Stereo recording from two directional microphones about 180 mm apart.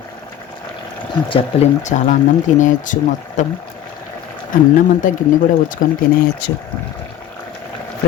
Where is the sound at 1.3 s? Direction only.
40° left (ahead or behind).